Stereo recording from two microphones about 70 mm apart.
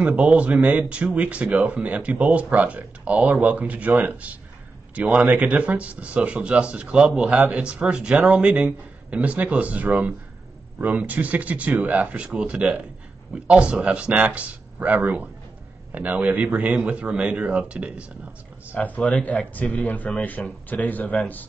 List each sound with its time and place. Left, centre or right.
0.0 s speech: centre
18.8 s a man's voice: centre